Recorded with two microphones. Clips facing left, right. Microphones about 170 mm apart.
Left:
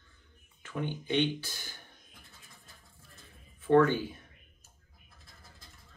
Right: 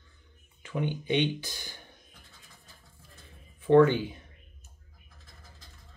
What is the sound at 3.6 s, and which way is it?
Speech, 20° right (ahead or behind).